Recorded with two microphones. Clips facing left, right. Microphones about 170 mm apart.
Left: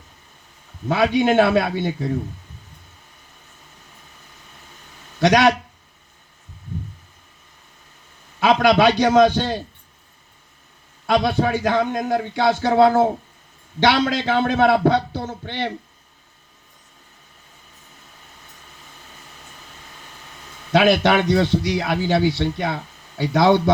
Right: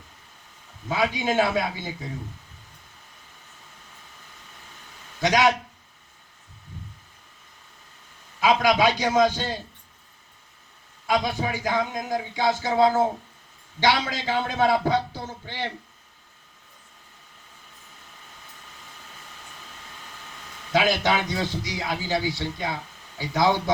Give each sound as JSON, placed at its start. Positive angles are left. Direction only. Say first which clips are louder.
{"t": 0.9, "sound": "a man's voice", "louder": "left 7 dB", "side_deg": 70}
{"t": 5.2, "sound": "a man's voice", "louder": "left 5 dB", "side_deg": 70}
{"t": 8.4, "sound": "a man's voice", "louder": "left 5 dB", "side_deg": 70}
{"t": 11.0, "sound": "a man's voice", "louder": "left 6 dB", "side_deg": 70}
{"t": 20.7, "sound": "a man's voice", "louder": "left 7 dB", "side_deg": 65}